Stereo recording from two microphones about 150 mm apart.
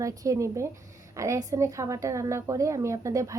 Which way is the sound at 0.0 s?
20° right (ahead or behind).